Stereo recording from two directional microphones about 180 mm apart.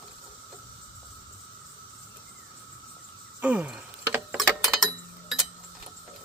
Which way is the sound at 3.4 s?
10° right (ahead or behind).